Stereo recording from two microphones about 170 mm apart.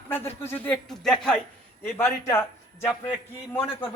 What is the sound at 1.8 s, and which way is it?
A man's voice, 15° left (ahead or behind).